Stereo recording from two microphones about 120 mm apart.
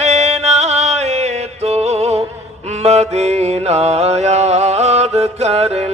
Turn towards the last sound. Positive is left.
turn(degrees=-60)  # may be behind; listen again after turning